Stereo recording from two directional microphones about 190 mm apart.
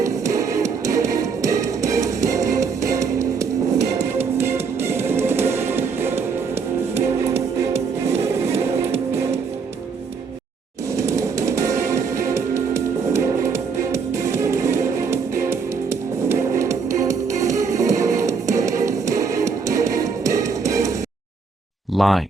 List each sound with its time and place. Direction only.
0.0 s music: 15° right (ahead or behind)
3.8 s music: 35° right (ahead or behind)
4.4 s music: 15° right (ahead or behind)
8.2 s music: 15° right (ahead or behind)
10.9 s music: 15° right (ahead or behind)
21.9 s a sound: centre (ahead or behind)